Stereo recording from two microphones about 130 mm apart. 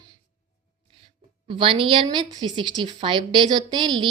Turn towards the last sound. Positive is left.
turn(degrees=-35)  # may be behind; listen again after turning